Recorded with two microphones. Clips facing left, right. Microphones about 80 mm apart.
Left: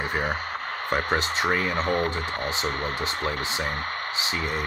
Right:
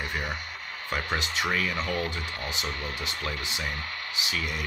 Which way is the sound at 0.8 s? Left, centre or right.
Left.